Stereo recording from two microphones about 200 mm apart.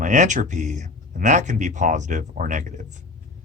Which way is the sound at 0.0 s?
40° right (ahead or behind).